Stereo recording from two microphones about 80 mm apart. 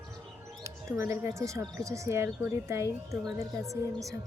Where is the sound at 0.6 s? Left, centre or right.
Right.